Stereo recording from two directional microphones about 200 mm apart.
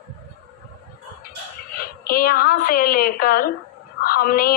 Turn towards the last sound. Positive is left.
turn(degrees=50)  # may be behind; listen again after turning